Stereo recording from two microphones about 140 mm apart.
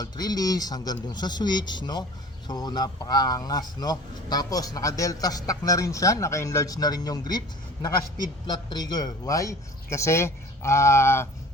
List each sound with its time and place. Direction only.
0.0 s a man's voice: 30° left (ahead or behind)